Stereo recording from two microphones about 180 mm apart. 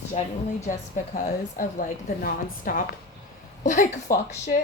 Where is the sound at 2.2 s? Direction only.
50° left (ahead or behind).